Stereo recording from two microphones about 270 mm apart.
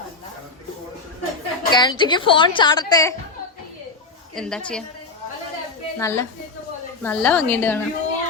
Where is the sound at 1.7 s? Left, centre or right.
Centre.